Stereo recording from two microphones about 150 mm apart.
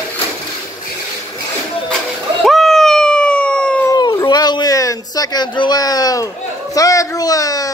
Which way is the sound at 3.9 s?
25° left (ahead or behind).